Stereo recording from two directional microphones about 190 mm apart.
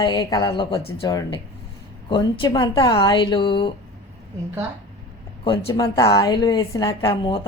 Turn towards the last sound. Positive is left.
turn(degrees=25)  # may be behind; listen again after turning